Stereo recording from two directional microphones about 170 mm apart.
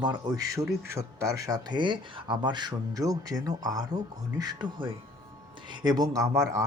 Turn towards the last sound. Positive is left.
turn(degrees=-20)  # may be behind; listen again after turning